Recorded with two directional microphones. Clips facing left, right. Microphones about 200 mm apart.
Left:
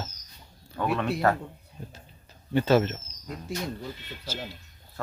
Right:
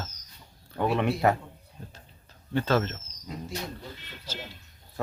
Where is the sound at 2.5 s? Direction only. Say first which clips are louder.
Left 4 dB; 10° left (ahead or behind).